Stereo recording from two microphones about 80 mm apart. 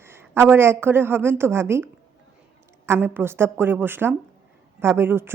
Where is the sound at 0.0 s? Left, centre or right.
Right.